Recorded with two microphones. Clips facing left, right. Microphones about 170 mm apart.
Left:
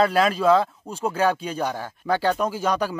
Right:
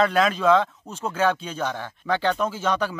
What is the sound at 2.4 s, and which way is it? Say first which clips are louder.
Speech: left 1 dB; 10° left (ahead or behind).